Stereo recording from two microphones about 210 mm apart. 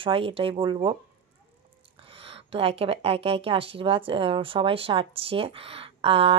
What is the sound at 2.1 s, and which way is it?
Speech, 25° right (ahead or behind).